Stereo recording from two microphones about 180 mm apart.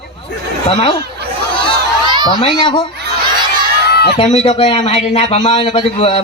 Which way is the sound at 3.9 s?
65° left (ahead or behind).